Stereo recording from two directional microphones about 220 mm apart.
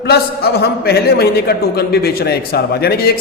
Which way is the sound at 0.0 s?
45° left (ahead or behind).